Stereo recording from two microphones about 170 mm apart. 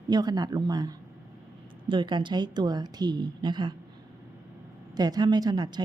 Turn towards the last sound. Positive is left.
turn(degrees=-25)  # may be behind; listen again after turning